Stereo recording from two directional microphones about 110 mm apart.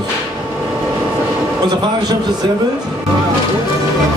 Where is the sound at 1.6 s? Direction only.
40° right (ahead or behind).